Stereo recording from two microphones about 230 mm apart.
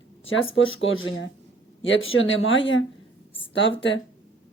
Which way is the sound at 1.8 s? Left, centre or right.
Left.